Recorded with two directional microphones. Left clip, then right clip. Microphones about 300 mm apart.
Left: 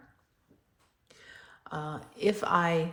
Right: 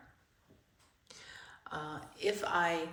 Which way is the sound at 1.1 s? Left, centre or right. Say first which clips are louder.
Even; centre.